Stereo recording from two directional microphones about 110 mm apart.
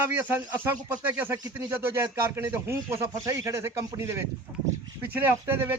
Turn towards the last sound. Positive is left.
turn(degrees=-20)  # may be behind; listen again after turning